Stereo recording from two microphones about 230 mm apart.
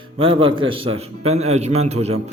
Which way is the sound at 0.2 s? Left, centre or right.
Right.